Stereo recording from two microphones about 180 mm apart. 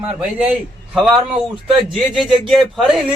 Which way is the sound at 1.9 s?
Centre (ahead or behind).